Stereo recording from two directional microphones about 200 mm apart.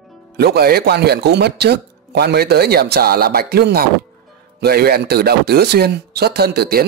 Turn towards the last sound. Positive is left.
turn(degrees=-50)  # may be behind; listen again after turning